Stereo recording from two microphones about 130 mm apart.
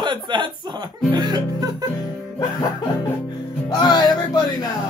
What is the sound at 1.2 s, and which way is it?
Music, 30° right (ahead or behind).